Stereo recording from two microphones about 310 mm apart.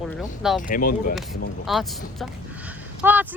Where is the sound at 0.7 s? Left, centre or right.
Left.